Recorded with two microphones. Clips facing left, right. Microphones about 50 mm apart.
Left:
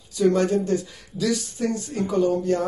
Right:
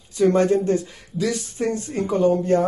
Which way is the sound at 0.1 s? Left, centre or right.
Right.